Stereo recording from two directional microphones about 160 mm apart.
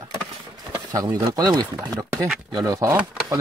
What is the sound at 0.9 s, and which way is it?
Speech, 25° right (ahead or behind).